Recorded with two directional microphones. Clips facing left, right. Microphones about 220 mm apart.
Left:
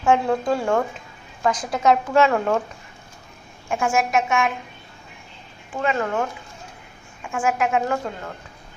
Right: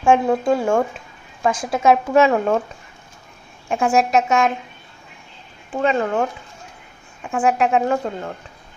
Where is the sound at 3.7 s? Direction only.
35° right (ahead or behind).